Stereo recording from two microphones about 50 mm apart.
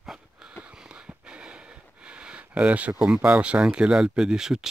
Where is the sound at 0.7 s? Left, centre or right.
Centre.